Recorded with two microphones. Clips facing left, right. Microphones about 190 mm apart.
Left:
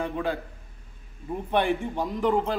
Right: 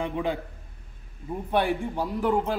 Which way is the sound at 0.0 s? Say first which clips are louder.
Even; 15° right (ahead or behind).